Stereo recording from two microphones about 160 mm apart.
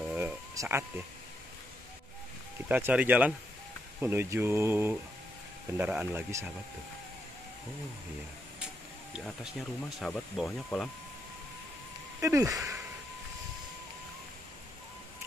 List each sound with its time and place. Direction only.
0.1 s a sound: 15° right (ahead or behind)
2.7 s speech: 10° right (ahead or behind)
9.2 s speech: centre (ahead or behind)
12.2 s speech: 20° right (ahead or behind)